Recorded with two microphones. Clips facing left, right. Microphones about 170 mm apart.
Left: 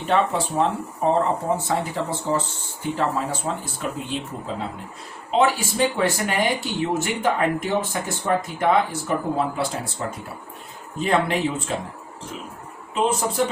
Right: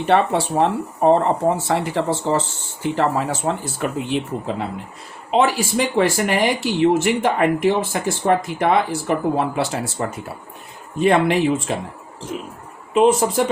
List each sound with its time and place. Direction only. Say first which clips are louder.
0.1 s speech: right 4 dB; 75° right (ahead or behind)
5.3 s speech: right 3 dB; 80° right
12.9 s speech: right 7 dB; 75° right (ahead or behind)